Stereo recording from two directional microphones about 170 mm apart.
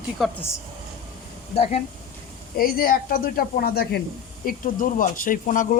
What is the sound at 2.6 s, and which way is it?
Speech, 60° left (ahead or behind).